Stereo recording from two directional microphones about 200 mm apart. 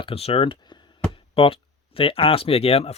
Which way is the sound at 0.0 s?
30° left (ahead or behind).